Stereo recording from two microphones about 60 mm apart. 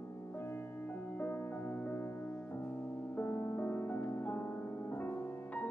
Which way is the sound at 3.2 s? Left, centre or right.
Left.